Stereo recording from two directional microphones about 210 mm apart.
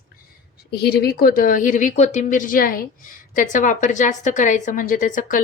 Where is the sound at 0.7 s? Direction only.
50° left (ahead or behind).